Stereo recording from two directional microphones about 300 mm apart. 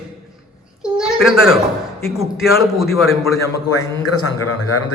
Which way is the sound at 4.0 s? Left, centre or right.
Left.